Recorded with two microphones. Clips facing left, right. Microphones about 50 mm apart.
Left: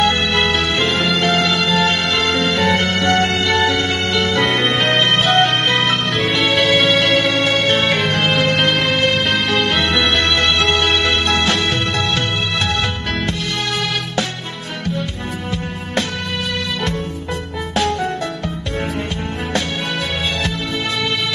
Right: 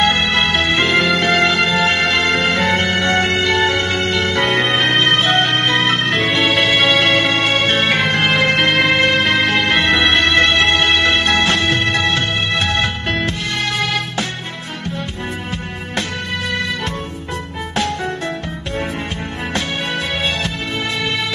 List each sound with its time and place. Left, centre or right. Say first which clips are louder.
0.0 s music: right 1 dB; right